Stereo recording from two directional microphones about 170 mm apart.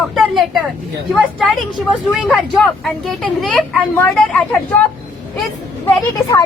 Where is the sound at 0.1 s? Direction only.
Centre (ahead or behind).